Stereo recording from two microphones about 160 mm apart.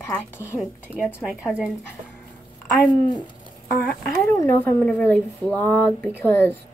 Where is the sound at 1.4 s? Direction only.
5° right (ahead or behind).